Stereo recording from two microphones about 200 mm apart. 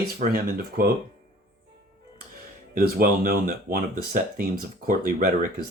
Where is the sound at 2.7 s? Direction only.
45° right (ahead or behind).